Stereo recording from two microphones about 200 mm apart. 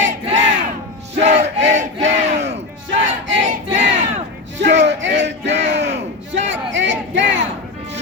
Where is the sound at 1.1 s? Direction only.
35° right (ahead or behind).